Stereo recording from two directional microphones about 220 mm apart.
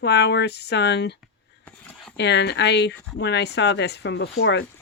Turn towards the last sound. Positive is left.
turn(degrees=55)  # may be behind; listen again after turning